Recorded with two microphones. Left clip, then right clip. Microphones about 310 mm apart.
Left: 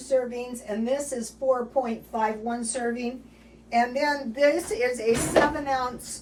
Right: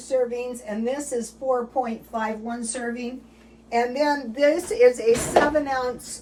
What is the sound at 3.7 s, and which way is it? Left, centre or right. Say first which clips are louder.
A woman's voice: right 2 dB; centre.